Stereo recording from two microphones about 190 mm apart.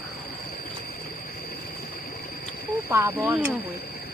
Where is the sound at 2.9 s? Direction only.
10° right (ahead or behind).